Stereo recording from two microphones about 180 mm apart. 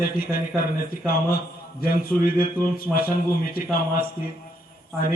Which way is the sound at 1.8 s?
55° left (ahead or behind).